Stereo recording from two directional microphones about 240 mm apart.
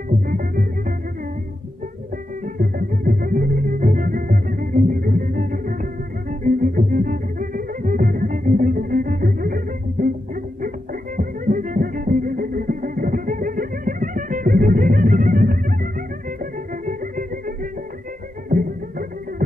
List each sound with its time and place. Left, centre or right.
0.3 s music: right
2.4 s music: right